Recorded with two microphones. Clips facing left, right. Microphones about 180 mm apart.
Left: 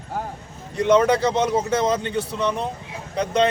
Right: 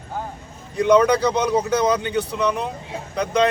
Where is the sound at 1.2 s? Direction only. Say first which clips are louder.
Right 1 dB; 25° left (ahead or behind).